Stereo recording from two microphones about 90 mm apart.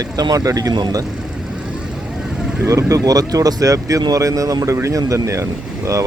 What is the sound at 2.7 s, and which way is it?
Speech, 35° right (ahead or behind).